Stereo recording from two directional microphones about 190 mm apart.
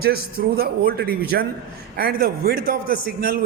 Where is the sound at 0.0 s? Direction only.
55° right (ahead or behind).